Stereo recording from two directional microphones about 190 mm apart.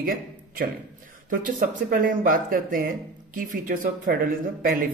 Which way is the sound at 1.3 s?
45° right (ahead or behind).